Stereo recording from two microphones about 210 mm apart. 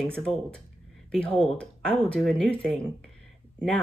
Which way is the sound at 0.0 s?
5° left (ahead or behind).